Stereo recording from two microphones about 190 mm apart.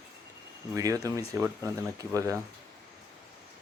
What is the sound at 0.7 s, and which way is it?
Speech, 20° right (ahead or behind).